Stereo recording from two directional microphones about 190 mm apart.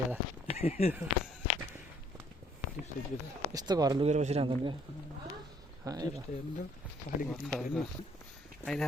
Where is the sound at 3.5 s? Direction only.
20° right (ahead or behind).